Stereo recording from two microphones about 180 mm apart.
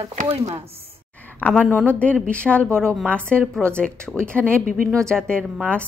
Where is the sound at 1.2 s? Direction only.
10° left (ahead or behind).